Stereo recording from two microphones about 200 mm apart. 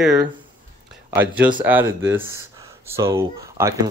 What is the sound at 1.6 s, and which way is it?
Speech, 10° right (ahead or behind).